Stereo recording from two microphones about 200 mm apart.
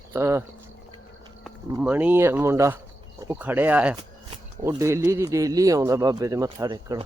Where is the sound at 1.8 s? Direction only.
5° right (ahead or behind).